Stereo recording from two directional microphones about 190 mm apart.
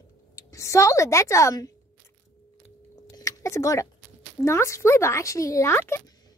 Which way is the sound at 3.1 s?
15° left (ahead or behind).